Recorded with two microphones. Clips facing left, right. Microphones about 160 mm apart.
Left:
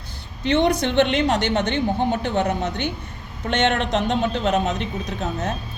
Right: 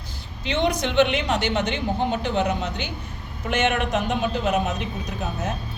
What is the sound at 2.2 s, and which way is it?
Speech, 55° left (ahead or behind).